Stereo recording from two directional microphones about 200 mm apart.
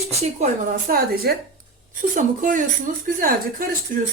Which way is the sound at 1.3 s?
50° right (ahead or behind).